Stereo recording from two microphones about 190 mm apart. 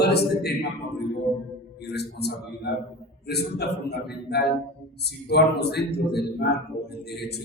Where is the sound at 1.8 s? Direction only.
60° left (ahead or behind).